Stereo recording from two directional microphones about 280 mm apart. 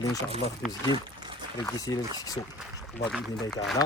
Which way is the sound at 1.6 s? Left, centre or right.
Centre.